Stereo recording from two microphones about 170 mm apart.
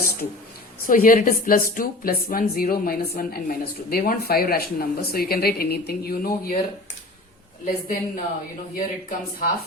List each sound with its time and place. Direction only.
0.9 s a woman's voice: 55° left (ahead or behind)
7.6 s a woman's voice: 50° left (ahead or behind)